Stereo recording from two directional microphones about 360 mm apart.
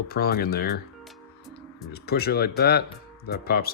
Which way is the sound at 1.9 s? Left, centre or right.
Left.